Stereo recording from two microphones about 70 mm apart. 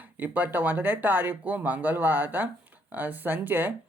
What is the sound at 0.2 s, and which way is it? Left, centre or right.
Speech, right.